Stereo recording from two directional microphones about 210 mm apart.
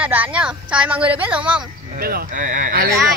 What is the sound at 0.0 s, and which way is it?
A woman's voice, 5° right (ahead or behind).